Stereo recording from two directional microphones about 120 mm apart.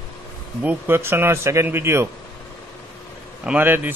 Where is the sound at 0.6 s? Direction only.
15° right (ahead or behind).